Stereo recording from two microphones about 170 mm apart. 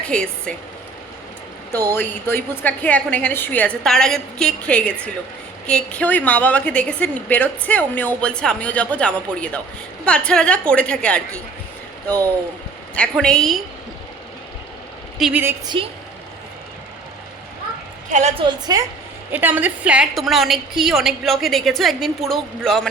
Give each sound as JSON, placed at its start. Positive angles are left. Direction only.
{"t": 0.1, "sound": "a woman's voice", "side_deg": 5}
{"t": 1.9, "sound": "a woman's voice", "side_deg": 15}
{"t": 13.0, "sound": "a woman's voice", "side_deg": 5}
{"t": 15.2, "sound": "a woman's voice", "side_deg": -10}
{"t": 15.7, "sound": "a woman's voice", "side_deg": -30}
{"t": 18.1, "sound": "a woman's voice", "side_deg": -40}
{"t": 18.4, "sound": "a woman's voice", "side_deg": -20}
{"t": 19.3, "sound": "a woman's voice", "side_deg": -10}